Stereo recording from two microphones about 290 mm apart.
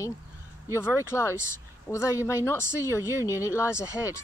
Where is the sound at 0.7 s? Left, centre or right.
Centre.